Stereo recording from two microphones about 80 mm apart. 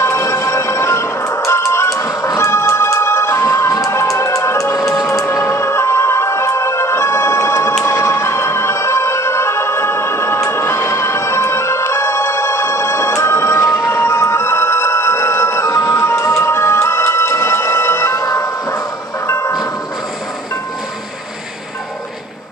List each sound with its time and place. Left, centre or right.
0.0 s music: left
4.7 s music: centre
5.0 s music: left